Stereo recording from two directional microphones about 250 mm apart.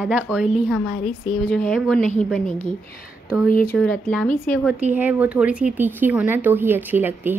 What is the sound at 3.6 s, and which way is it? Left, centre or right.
Speech, centre.